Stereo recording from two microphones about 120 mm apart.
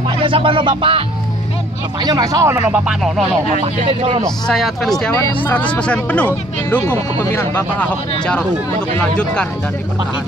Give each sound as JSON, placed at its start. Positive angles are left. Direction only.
{"t": 0.2, "sound": "music", "side_deg": -45}
{"t": 2.0, "sound": "speech", "side_deg": -30}
{"t": 2.9, "sound": "speech", "side_deg": -5}
{"t": 3.6, "sound": "speech", "side_deg": -55}
{"t": 4.5, "sound": "speech", "side_deg": 0}
{"t": 5.1, "sound": "speech", "side_deg": 20}
{"t": 6.9, "sound": "speech", "side_deg": 25}
{"t": 7.5, "sound": "speech", "side_deg": 15}